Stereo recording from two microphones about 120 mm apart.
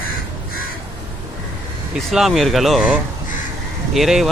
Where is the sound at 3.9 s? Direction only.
5° right (ahead or behind).